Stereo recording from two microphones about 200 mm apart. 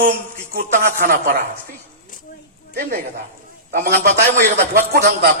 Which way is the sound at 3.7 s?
45° right (ahead or behind).